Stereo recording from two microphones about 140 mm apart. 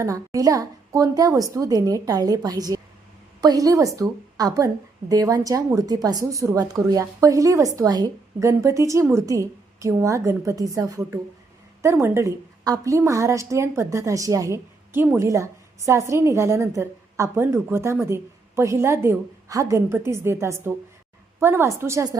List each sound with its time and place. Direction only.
0.0 s a woman's voice: 25° right (ahead or behind)